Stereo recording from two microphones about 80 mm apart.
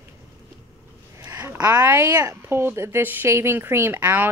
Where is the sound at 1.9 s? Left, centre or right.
Right.